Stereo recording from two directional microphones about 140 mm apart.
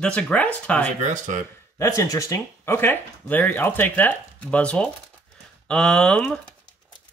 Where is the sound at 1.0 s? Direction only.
60° right (ahead or behind).